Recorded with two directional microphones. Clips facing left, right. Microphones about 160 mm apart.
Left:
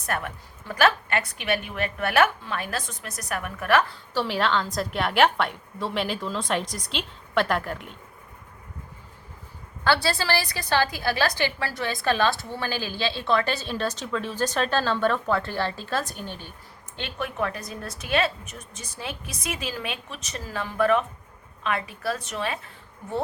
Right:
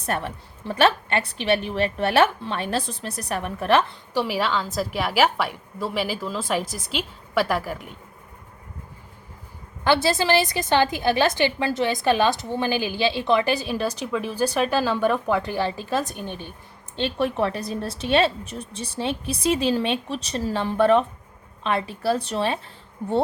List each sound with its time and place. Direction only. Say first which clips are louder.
0.0 s a woman's voice: right 3 dB; 30° right (ahead or behind)
4.1 s a woman's voice: right 1 dB; 10° right (ahead or behind)
9.8 s a woman's voice: right 4 dB; 20° right (ahead or behind)
17.0 s a woman's voice: right 6 dB; 30° right (ahead or behind)